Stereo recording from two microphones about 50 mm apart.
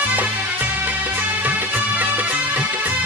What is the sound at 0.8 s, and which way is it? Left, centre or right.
Music, right.